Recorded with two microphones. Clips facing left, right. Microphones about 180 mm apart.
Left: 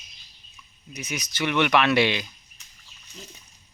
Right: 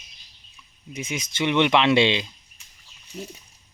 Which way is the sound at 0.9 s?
25° right (ahead or behind).